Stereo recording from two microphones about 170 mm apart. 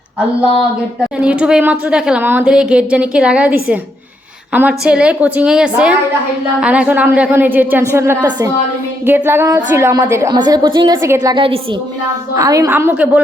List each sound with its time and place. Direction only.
1.2 s a woman's voice: 5° right (ahead or behind)
4.9 s a woman's voice: 5° right (ahead or behind); by 11.6 s 30° right (ahead or behind)
12.3 s a woman's voice: 20° right (ahead or behind)